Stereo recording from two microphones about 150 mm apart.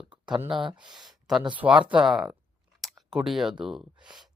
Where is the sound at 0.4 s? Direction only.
35° right (ahead or behind).